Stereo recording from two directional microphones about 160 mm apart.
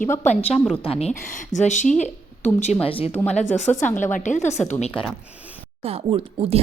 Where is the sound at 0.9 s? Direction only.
40° left (ahead or behind).